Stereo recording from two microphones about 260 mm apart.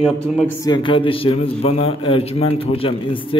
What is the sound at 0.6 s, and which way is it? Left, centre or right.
A man's voice, centre.